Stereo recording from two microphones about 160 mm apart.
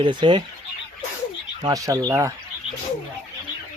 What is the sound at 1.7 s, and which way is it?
Speech, 20° right (ahead or behind).